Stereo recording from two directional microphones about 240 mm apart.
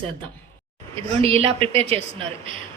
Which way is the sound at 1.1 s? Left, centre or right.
Right.